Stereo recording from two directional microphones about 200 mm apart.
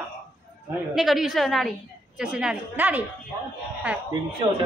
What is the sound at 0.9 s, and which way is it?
A woman's voice, centre (ahead or behind).